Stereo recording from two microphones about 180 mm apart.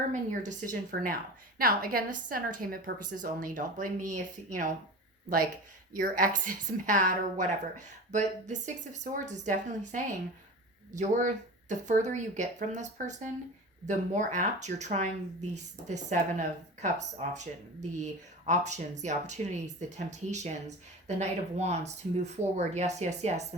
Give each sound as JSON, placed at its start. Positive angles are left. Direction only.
{"t": 0.1, "sound": "a woman's voice", "side_deg": -45}
{"t": 5.9, "sound": "a woman's voice", "side_deg": -50}